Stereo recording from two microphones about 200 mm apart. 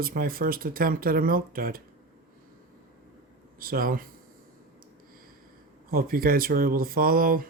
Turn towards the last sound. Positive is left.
turn(degrees=-45)  # may be behind; listen again after turning